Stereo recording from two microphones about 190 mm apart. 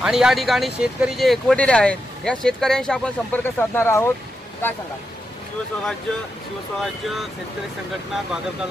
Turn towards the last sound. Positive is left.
turn(degrees=0)  # may be behind; listen again after turning